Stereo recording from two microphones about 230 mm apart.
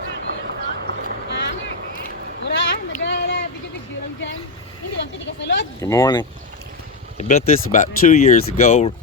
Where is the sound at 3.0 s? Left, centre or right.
Left.